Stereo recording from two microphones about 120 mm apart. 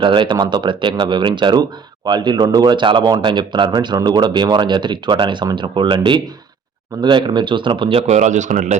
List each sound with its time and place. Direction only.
0.0 s speech: 45° right (ahead or behind)
8.0 s speech: 80° right